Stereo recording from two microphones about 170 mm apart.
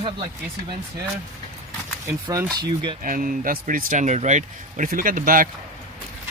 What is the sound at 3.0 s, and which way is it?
Speech, 55° right (ahead or behind).